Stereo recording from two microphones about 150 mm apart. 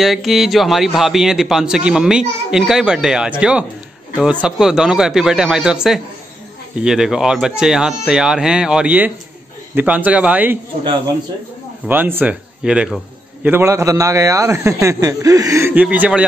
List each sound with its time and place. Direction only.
0.0 s a man's voice: centre (ahead or behind)
11.9 s a man's voice: 15° right (ahead or behind)